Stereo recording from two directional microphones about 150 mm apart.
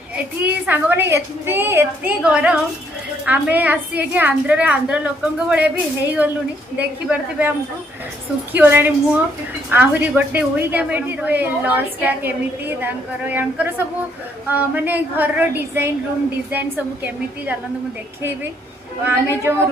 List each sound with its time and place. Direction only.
0.1 s a woman's voice: 10° right (ahead or behind)
6.8 s a woman's voice: 10° right (ahead or behind)
8.5 s a woman's voice: 15° right (ahead or behind)
19.0 s a woman's voice: 15° right (ahead or behind)